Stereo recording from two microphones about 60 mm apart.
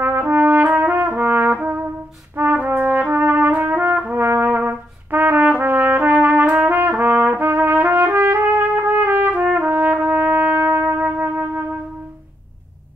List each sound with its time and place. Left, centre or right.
0.0 s brass instrument: right
2.3 s trumpet: right
4.0 s brass instrument: right